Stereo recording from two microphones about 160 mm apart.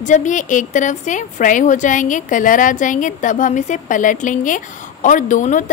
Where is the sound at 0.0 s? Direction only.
50° left (ahead or behind).